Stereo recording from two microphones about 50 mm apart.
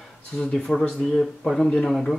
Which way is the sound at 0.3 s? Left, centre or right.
Centre.